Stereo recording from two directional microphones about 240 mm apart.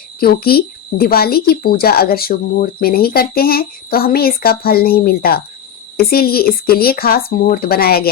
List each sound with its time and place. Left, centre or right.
0.2 s speech: left